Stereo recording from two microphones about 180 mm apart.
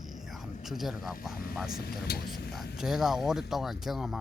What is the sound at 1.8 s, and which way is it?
Speech, 60° left (ahead or behind).